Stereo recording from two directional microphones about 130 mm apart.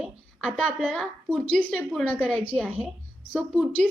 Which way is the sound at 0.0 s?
5° left (ahead or behind).